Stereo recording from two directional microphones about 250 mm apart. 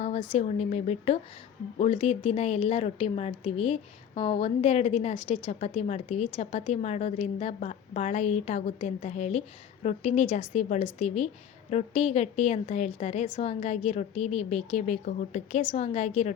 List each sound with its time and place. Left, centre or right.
0.3 s speech: left